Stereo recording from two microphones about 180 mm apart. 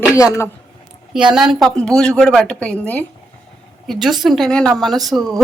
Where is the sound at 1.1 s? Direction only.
5° right (ahead or behind).